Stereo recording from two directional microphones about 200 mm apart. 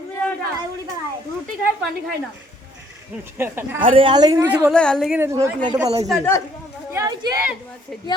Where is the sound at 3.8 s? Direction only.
25° right (ahead or behind).